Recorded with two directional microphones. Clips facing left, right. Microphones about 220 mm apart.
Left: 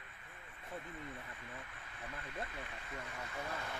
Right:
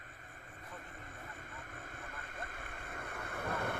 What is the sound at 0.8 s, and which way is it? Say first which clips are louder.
Vehicle: left 7 dB; 45° right (ahead or behind).